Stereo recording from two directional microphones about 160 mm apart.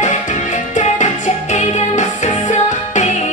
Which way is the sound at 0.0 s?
50° left (ahead or behind).